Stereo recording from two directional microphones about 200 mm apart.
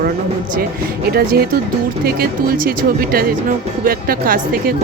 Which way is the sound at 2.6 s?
50° right (ahead or behind).